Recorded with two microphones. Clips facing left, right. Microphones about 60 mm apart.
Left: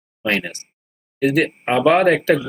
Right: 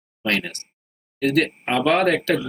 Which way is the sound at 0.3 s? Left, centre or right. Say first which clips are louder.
Left 2 dB; centre.